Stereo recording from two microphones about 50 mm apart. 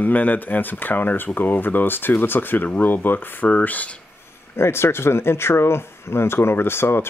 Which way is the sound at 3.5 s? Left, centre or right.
Left.